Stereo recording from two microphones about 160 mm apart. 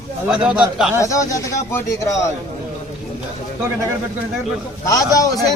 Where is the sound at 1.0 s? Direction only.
20° left (ahead or behind).